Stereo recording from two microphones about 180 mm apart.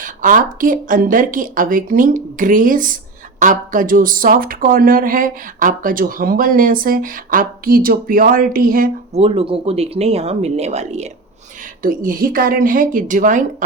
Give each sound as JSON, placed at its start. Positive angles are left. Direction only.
{"t": 0.0, "sound": "speech", "side_deg": -45}
{"t": 9.1, "sound": "speech", "side_deg": -30}
{"t": 11.8, "sound": "speech", "side_deg": -50}